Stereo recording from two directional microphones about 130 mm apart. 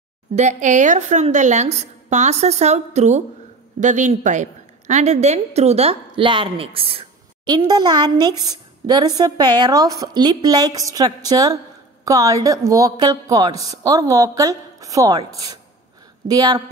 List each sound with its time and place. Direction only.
0.4 s a woman's voice: 70° right (ahead or behind); by 16.6 s 30° right (ahead or behind)